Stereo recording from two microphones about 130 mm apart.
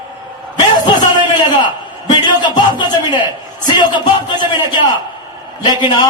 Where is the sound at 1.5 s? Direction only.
35° left (ahead or behind).